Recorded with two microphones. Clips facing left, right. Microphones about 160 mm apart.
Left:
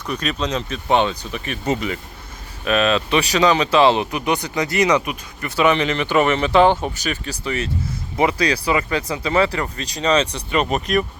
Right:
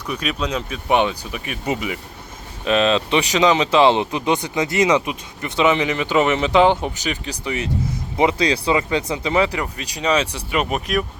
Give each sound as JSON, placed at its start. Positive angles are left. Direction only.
{"t": 0.0, "sound": "speech", "side_deg": -10}
{"t": 2.6, "sound": "speech", "side_deg": -25}